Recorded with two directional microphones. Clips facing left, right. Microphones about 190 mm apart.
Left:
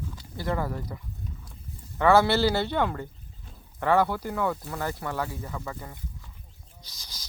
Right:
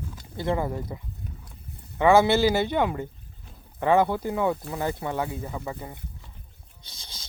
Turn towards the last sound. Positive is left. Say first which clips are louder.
# right 1 dB
turn(degrees=-25)  # may be behind; listen again after turning